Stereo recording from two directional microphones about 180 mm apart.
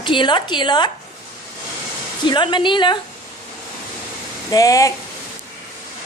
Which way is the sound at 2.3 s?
25° left (ahead or behind).